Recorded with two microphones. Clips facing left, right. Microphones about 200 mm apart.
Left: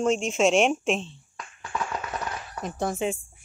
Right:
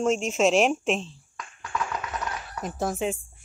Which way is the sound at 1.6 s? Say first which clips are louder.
Even; 25° left (ahead or behind).